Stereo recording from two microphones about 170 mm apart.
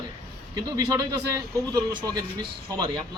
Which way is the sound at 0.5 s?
25° right (ahead or behind).